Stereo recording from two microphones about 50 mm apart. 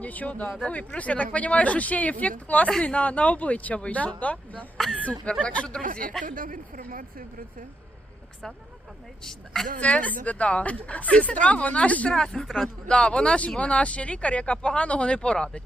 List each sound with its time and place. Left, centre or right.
0.0 s speech: left
9.2 s a woman's voice: centre
9.8 s speech: left
12.1 s a woman's voice: centre
12.5 s speech: centre
12.9 s speech: left